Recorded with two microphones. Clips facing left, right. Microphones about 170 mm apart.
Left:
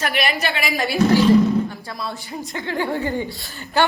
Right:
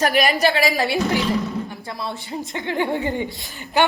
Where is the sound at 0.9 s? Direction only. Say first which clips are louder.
Left 6 dB; 20° right (ahead or behind).